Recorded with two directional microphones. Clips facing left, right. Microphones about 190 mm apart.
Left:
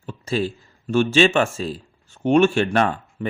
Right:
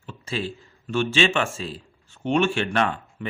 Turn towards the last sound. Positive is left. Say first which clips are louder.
# left 4 dB
turn(degrees=40)  # may be behind; listen again after turning